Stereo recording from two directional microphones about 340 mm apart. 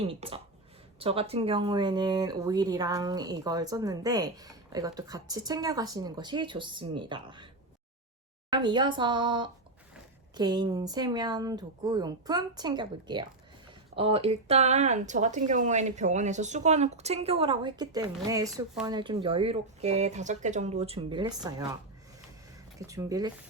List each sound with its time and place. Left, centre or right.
0.0 s speech: centre
8.5 s speech: centre
22.9 s speech: centre